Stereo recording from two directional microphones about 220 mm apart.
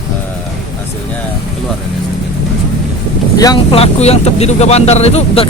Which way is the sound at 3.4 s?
20° left (ahead or behind).